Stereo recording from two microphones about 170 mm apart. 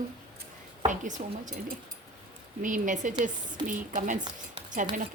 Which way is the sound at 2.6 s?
50° right (ahead or behind).